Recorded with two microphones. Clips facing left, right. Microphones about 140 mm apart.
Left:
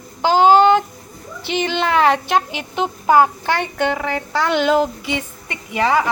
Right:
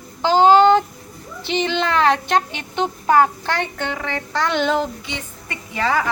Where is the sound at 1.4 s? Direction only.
5° left (ahead or behind).